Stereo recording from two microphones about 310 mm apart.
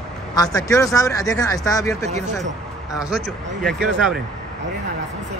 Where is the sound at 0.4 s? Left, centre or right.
Centre.